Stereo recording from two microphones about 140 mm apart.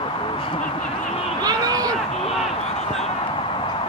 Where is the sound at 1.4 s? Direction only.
30° right (ahead or behind).